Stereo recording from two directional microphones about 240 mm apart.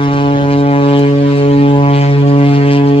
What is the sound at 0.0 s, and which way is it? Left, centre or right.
Vehicle, left.